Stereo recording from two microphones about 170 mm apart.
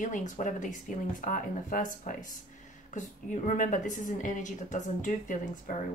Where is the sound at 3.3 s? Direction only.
50° left (ahead or behind).